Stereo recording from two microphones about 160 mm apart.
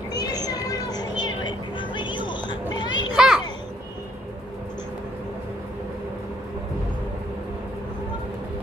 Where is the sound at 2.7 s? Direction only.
25° left (ahead or behind).